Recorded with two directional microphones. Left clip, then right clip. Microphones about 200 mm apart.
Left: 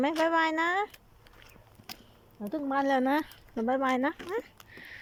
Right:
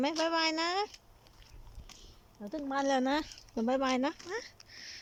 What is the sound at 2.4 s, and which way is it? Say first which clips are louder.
Speech: left 4 dB; 5° left (ahead or behind).